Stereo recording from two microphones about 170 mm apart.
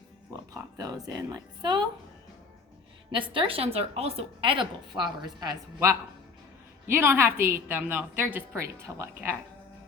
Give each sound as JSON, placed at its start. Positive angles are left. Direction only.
{"t": 0.5, "sound": "speech", "side_deg": -20}
{"t": 3.1, "sound": "a woman's voice", "side_deg": -30}